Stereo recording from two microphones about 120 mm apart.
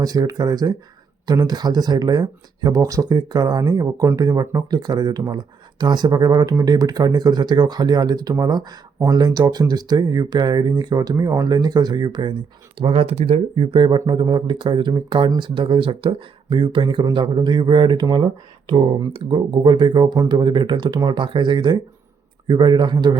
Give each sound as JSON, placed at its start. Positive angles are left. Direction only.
{"t": 0.0, "sound": "speech", "side_deg": -30}
{"t": 12.8, "sound": "speech", "side_deg": -50}